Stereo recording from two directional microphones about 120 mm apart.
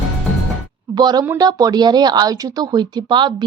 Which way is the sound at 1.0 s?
35° right (ahead or behind).